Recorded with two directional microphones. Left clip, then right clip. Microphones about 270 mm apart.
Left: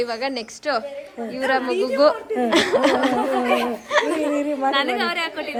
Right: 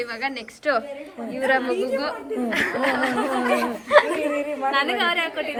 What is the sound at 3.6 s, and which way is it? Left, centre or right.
Speech, centre.